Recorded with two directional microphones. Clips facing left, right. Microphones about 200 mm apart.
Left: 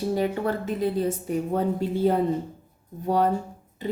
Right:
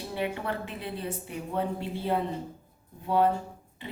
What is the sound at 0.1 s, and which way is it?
A woman's voice, 40° left (ahead or behind).